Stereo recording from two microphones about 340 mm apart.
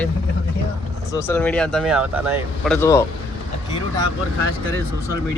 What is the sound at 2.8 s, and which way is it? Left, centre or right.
Speech, centre.